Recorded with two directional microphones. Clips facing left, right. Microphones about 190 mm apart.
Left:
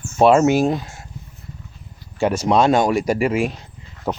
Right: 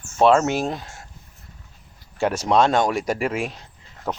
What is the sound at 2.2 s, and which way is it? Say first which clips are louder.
Speech: left 2 dB; centre (ahead or behind).